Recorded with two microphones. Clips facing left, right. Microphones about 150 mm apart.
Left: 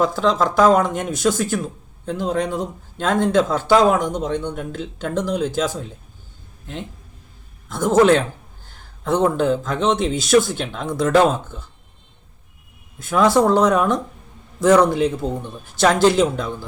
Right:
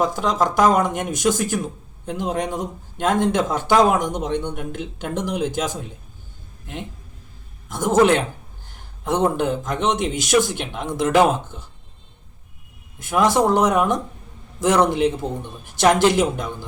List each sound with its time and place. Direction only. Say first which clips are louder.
0.0 s a man's voice: left 2 dB; 15° right (ahead or behind)
7.7 s a man's voice: left 2 dB; 20° right (ahead or behind)
13.0 s a man's voice: left 2 dB; 20° right (ahead or behind)